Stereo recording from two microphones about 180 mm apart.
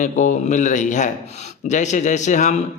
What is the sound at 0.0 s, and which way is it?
A man's voice, 45° left (ahead or behind).